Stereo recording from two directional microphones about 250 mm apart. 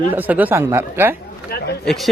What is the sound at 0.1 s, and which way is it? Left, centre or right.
Speech, centre.